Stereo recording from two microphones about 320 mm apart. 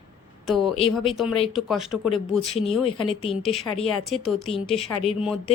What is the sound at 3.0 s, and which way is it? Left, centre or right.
Speech, centre.